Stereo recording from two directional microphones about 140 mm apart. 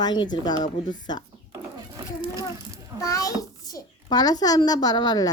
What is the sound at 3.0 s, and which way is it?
A child's voice, 25° left (ahead or behind).